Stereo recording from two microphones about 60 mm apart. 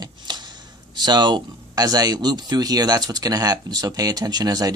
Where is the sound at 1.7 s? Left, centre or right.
Right.